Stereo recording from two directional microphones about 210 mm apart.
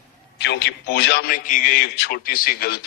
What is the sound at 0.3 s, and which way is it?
A man's voice, 55° left (ahead or behind).